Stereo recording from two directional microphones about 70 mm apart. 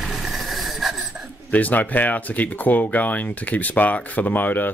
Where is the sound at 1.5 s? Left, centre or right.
Left.